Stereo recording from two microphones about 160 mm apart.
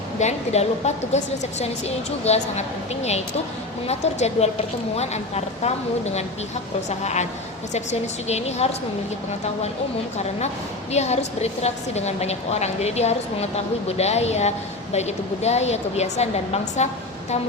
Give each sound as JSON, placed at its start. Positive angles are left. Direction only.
{"t": 0.2, "sound": "a woman's voice", "side_deg": 45}
{"t": 10.9, "sound": "a woman's voice", "side_deg": 45}